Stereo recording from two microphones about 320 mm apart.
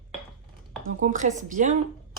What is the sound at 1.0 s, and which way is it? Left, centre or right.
Speech, right.